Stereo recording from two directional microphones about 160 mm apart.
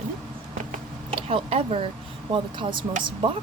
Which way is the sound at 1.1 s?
35° right (ahead or behind).